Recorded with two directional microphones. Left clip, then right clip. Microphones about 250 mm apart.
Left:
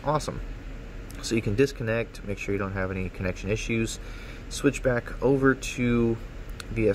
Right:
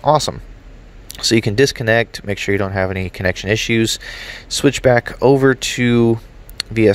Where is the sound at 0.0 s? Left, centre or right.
Right.